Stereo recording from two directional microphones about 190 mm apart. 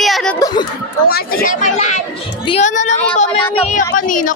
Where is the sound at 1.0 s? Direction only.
50° left (ahead or behind).